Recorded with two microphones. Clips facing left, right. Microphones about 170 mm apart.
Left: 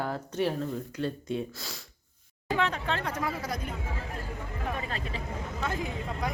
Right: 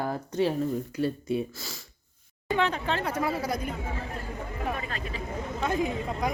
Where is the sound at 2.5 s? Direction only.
Centre (ahead or behind).